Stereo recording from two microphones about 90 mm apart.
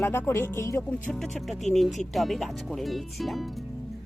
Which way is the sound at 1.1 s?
Centre (ahead or behind).